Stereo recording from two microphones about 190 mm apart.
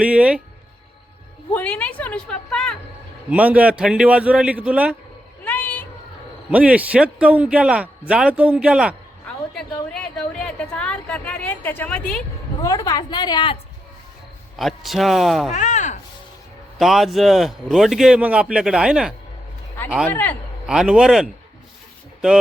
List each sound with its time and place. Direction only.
0.0 s a man's voice: 5° right (ahead or behind)
1.5 s a woman's voice: 5° left (ahead or behind)
3.2 s a man's voice: 5° right (ahead or behind)
5.5 s a sound: 10° left (ahead or behind)
6.5 s a man's voice: 5° right (ahead or behind)
12.6 s a woman's voice: 15° left (ahead or behind)
14.6 s a man's voice: centre (ahead or behind)
15.5 s speech: 40° left (ahead or behind)
16.7 s a man's voice: centre (ahead or behind)
20.1 s a woman's voice: 10° left (ahead or behind)
20.7 s a man's voice: 5° right (ahead or behind)